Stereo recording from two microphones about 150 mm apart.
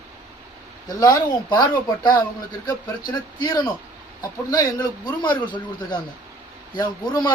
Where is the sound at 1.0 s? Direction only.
25° left (ahead or behind).